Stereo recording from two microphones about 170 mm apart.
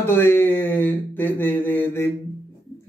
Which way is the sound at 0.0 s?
15° left (ahead or behind).